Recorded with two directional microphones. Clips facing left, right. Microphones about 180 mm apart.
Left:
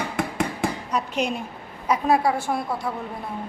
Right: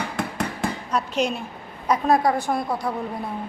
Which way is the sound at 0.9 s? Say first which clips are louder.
Right 4 dB; 15° left (ahead or behind).